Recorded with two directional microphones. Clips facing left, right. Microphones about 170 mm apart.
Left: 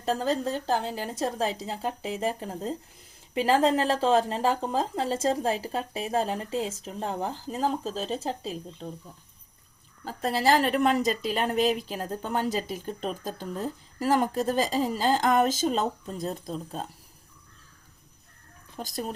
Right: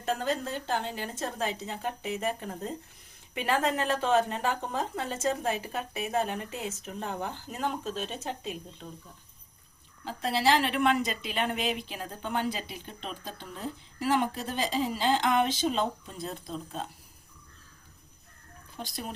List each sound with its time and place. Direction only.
0.0 s a woman's voice: 35° left (ahead or behind)
10.0 s speech: 45° left (ahead or behind)
18.8 s a woman's voice: 40° left (ahead or behind)